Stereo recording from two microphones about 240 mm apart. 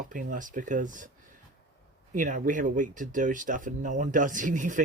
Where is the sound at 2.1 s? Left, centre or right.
Right.